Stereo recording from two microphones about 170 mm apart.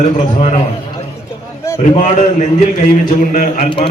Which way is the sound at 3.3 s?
50° left (ahead or behind).